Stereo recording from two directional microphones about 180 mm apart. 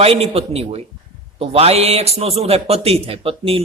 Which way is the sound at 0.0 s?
35° right (ahead or behind).